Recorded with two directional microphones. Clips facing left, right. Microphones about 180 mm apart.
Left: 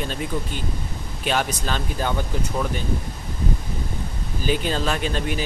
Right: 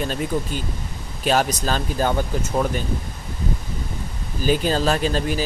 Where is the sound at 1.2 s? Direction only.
40° right (ahead or behind).